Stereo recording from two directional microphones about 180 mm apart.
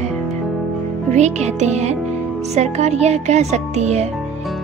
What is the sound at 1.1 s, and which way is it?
Speech, 40° right (ahead or behind).